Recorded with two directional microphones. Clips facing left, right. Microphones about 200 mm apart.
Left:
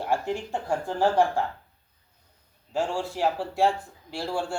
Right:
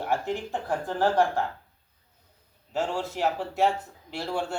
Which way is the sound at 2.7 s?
10° left (ahead or behind).